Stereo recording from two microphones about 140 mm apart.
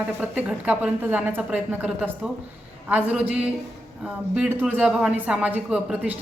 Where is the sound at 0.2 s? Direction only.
10° right (ahead or behind).